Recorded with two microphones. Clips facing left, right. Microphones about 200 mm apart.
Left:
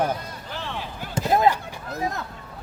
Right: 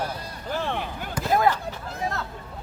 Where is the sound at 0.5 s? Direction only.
55° right (ahead or behind).